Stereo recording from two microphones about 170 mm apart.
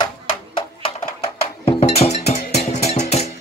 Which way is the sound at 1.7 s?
35° left (ahead or behind).